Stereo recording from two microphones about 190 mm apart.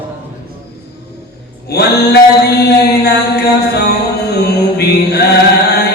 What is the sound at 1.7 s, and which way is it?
Mantra, 60° left (ahead or behind).